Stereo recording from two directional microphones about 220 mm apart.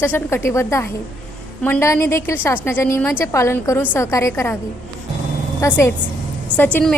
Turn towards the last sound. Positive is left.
turn(degrees=5)  # may be behind; listen again after turning